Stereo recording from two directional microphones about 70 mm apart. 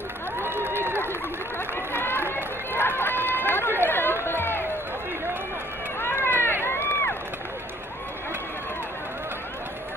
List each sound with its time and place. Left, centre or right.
0.7 s run: right
1.9 s run: left
3.8 s a sound: left
5.9 s run: left